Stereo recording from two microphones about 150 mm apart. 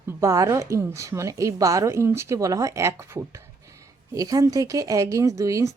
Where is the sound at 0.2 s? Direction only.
20° right (ahead or behind).